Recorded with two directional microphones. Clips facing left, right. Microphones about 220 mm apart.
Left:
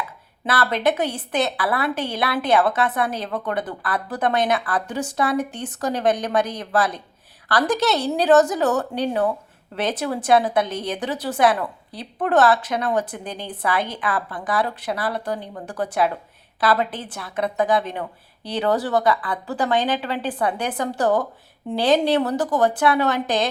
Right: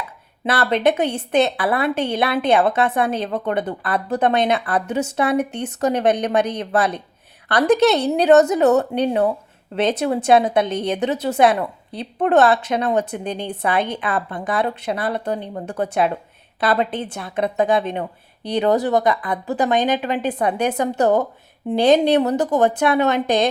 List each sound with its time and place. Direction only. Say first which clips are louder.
0.4 s a woman's voice: right 3 dB; 25° right (ahead or behind)